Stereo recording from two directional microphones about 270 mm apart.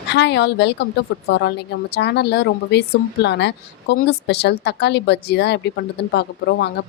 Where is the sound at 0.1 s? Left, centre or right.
Left.